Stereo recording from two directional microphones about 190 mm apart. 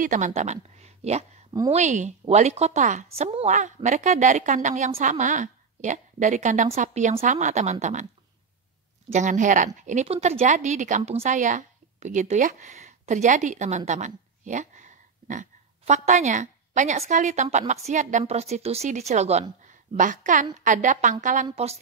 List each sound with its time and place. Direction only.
0.0 s a woman's voice: 40° right (ahead or behind)
9.1 s a woman's voice: 40° right (ahead or behind)